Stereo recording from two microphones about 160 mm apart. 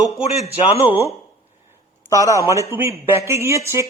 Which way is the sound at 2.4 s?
20° right (ahead or behind).